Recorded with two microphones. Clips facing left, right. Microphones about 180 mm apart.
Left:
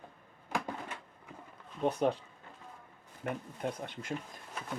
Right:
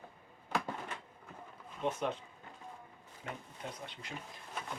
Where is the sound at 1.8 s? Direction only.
35° left (ahead or behind).